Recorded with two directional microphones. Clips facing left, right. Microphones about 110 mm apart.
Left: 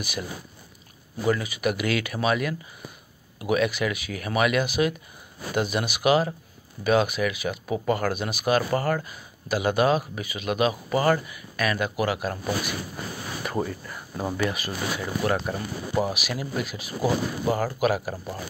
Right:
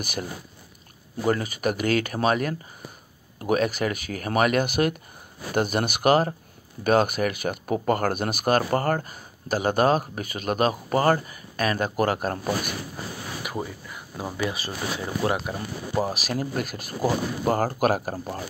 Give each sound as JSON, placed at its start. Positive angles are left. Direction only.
{"t": 0.0, "sound": "speech", "side_deg": -50}
{"t": 13.4, "sound": "speech", "side_deg": -10}
{"t": 14.3, "sound": "speech", "side_deg": -15}
{"t": 14.6, "sound": "speech", "side_deg": -30}